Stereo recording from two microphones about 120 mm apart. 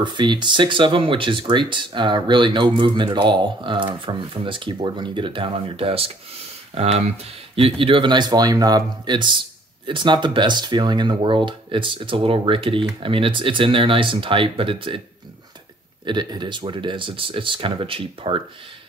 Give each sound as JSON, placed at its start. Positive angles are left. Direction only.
{"t": 0.0, "sound": "speech", "side_deg": -40}
{"t": 7.8, "sound": "speech", "side_deg": -45}
{"t": 16.1, "sound": "speech", "side_deg": -40}